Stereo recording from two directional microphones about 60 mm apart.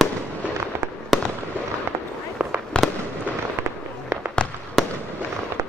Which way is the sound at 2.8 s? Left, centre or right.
Centre.